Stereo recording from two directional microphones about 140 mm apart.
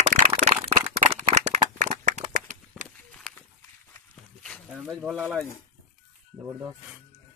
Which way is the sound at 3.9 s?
5° left (ahead or behind).